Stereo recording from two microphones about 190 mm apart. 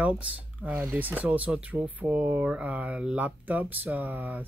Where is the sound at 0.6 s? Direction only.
10° right (ahead or behind).